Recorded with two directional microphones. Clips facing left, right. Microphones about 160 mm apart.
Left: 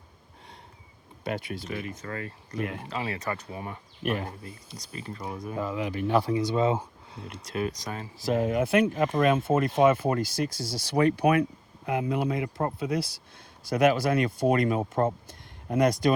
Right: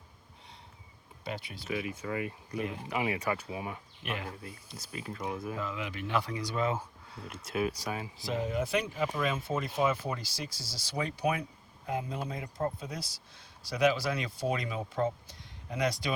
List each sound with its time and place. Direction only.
1.2 s speech: 50° left (ahead or behind)
1.6 s speech: 5° right (ahead or behind)
4.0 s speech: 45° left (ahead or behind)
4.3 s speech: centre (ahead or behind)
5.5 s speech: 35° left (ahead or behind)
7.2 s speech: 5° right (ahead or behind)
8.2 s speech: 55° left (ahead or behind)
13.7 s speech: 50° left (ahead or behind)